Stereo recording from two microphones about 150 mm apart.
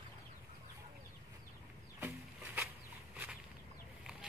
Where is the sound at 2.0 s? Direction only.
15° right (ahead or behind).